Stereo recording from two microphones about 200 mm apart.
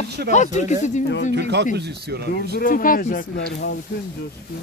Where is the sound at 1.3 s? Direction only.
60° right (ahead or behind).